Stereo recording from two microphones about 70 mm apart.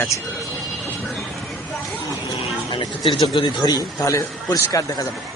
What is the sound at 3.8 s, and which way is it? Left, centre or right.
A man's voice, left.